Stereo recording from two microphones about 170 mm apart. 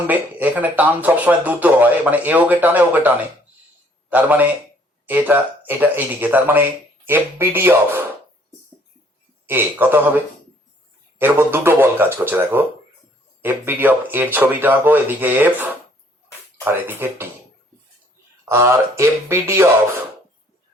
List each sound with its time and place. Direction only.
0.1 s speech: 10° right (ahead or behind)
9.5 s speech: 10° right (ahead or behind)
11.2 s speech: 15° right (ahead or behind)
18.4 s speech: 15° right (ahead or behind)